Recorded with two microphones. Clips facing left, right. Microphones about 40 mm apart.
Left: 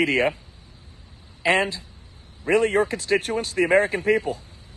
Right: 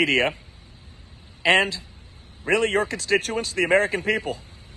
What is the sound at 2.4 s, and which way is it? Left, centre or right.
A man's voice, right.